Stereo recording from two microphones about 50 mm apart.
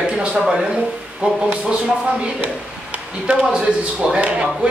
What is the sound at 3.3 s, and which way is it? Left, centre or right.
Speech, right.